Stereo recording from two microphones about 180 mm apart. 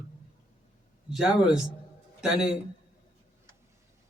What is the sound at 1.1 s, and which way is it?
Speech, 5° right (ahead or behind).